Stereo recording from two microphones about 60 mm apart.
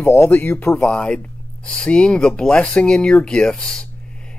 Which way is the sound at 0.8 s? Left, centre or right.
Centre.